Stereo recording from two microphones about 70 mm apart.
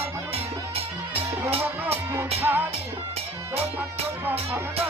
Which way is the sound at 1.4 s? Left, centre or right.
Right.